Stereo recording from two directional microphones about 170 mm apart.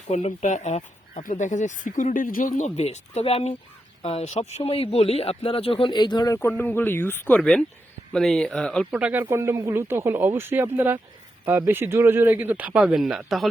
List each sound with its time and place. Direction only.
0.1 s speech: 45° left (ahead or behind); by 8.9 s 5° left (ahead or behind)
8.9 s speech: 5° right (ahead or behind)